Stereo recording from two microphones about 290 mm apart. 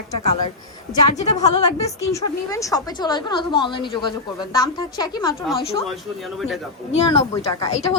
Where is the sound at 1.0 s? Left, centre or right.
Centre.